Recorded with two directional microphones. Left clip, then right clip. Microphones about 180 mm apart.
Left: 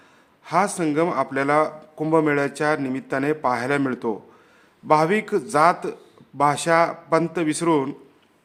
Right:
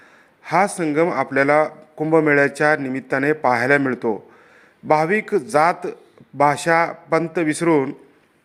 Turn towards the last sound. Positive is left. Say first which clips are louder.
# right 3 dB
turn(degrees=-10)  # may be behind; listen again after turning